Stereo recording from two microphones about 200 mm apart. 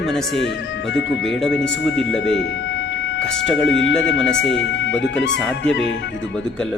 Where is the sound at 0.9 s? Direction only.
60° left (ahead or behind).